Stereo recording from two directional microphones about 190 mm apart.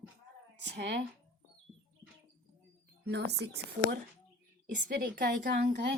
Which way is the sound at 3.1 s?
65° right (ahead or behind).